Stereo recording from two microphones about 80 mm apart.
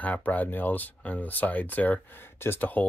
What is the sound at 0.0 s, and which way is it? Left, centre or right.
Speech, left.